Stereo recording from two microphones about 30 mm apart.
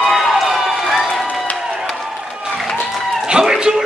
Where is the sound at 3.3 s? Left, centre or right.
Right.